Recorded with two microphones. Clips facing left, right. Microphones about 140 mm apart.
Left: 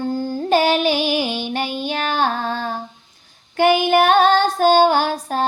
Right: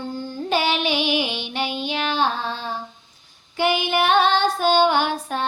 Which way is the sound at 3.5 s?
50° left (ahead or behind).